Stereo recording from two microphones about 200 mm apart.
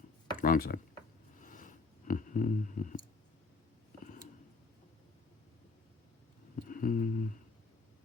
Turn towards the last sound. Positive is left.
turn(degrees=40)  # may be behind; listen again after turning